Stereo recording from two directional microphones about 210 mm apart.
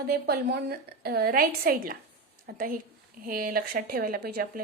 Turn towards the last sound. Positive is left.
turn(degrees=-45)  # may be behind; listen again after turning